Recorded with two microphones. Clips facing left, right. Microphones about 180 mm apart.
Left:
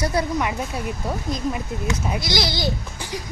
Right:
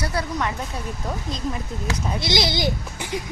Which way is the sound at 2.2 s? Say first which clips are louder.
Right 5 dB; 20° right (ahead or behind).